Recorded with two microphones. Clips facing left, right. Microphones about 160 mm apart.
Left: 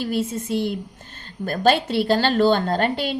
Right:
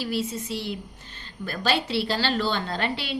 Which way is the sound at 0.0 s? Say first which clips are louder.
Left 4 dB; 50° left (ahead or behind).